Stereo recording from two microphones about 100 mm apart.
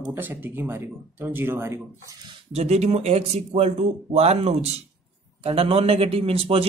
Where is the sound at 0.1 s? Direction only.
20° right (ahead or behind).